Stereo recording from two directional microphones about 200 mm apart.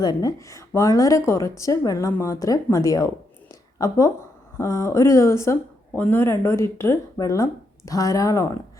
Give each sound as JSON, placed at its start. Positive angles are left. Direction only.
{"t": 0.0, "sound": "a woman's voice", "side_deg": 20}
{"t": 3.5, "sound": "a sound", "side_deg": 15}
{"t": 4.5, "sound": "a woman's voice", "side_deg": 15}